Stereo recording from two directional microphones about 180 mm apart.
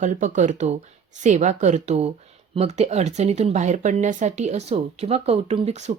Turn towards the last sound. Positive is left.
turn(degrees=-35)  # may be behind; listen again after turning